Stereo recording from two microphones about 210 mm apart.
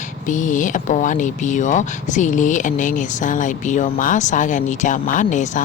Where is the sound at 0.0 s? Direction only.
35° left (ahead or behind).